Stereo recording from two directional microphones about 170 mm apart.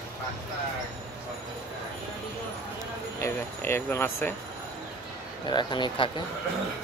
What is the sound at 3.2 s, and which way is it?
Speech, 15° left (ahead or behind).